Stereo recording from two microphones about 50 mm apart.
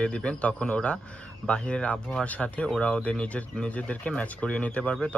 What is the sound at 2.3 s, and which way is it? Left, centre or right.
Speech, left.